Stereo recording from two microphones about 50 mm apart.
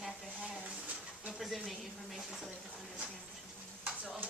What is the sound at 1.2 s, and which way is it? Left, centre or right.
Speech, centre.